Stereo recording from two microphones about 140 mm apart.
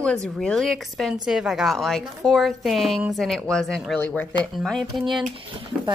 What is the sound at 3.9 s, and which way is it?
A woman's voice, 15° left (ahead or behind).